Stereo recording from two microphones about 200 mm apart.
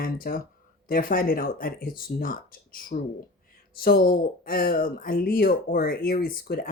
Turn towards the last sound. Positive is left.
turn(degrees=45)  # may be behind; listen again after turning